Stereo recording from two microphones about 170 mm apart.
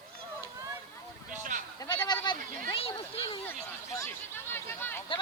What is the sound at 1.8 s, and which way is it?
Sheep, 25° left (ahead or behind).